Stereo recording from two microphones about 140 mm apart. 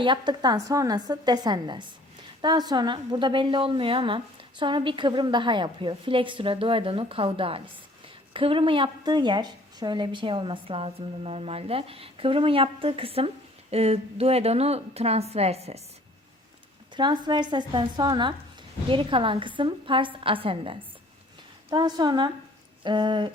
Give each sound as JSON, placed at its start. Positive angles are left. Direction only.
{"t": 0.0, "sound": "a woman's voice", "side_deg": -35}
{"t": 16.9, "sound": "a woman's voice", "side_deg": -35}